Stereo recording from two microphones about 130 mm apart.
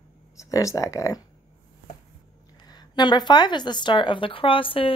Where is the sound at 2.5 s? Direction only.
35° left (ahead or behind).